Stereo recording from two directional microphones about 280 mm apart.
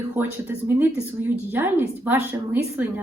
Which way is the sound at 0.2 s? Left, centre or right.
Centre.